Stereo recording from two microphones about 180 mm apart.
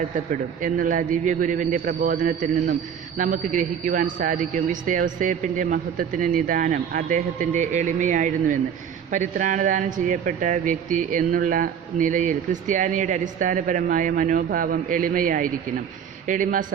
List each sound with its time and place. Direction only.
0.6 s speech: 45° right (ahead or behind)